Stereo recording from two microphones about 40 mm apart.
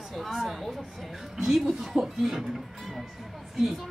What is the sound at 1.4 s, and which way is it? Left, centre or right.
A woman's voice, centre.